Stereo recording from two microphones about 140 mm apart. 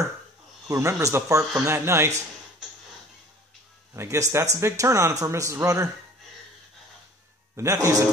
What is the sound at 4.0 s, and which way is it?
Speech, 20° right (ahead or behind).